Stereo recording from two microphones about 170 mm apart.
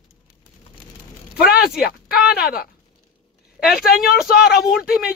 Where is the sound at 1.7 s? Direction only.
65° left (ahead or behind).